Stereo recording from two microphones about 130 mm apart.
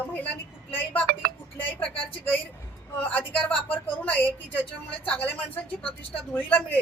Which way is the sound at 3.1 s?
10° left (ahead or behind).